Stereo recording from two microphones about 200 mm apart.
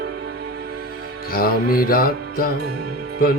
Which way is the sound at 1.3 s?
45° left (ahead or behind).